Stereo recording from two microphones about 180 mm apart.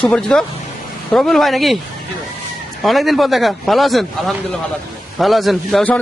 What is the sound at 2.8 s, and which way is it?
A man's voice, centre (ahead or behind).